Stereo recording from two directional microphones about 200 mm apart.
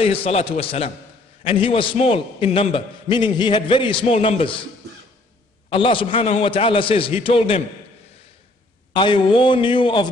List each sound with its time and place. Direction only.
0.0 s a man's voice: 30° left (ahead or behind)
5.7 s a man's voice: 25° left (ahead or behind)
8.9 s a man's voice: 25° left (ahead or behind)